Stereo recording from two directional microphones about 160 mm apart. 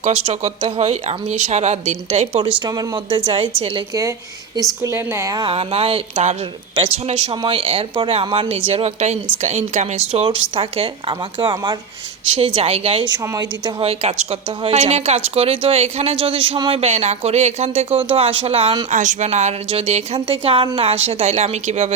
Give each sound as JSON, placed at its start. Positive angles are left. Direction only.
{"t": 0.0, "sound": "speech", "side_deg": -40}
{"t": 4.8, "sound": "a woman's voice", "side_deg": -15}
{"t": 5.5, "sound": "speech", "side_deg": -40}
{"t": 14.0, "sound": "speech", "side_deg": -45}
{"t": 18.9, "sound": "speech", "side_deg": -50}